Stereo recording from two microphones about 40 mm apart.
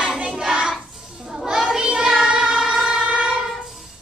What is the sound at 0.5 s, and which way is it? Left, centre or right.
Child singing, right.